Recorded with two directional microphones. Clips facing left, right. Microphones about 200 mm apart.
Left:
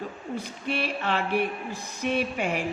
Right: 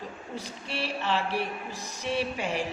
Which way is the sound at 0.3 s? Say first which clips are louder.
Left 5 dB; 55° left (ahead or behind).